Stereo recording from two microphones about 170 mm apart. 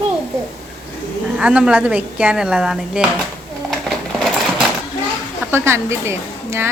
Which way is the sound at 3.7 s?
Centre (ahead or behind).